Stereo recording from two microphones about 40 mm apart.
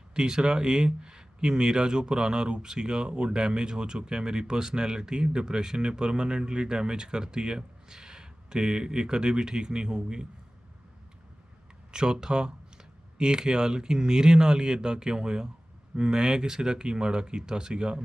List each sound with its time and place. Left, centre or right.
0.1 s speech: centre
11.9 s speech: right